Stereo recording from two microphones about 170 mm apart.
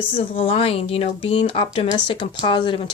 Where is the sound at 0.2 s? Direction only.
35° left (ahead or behind).